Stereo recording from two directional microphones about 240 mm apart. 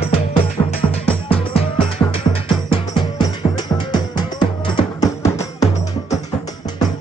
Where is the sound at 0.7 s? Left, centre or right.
Left.